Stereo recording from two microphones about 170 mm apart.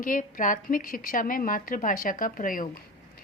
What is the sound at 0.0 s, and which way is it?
A woman's voice, 55° left (ahead or behind).